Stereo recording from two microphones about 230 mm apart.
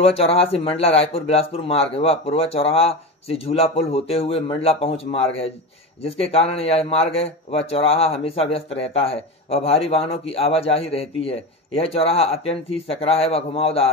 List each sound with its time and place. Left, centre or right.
0.0 s speech: left